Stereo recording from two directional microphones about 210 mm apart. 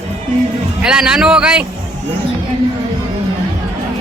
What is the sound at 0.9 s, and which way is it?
Speech, 5° right (ahead or behind).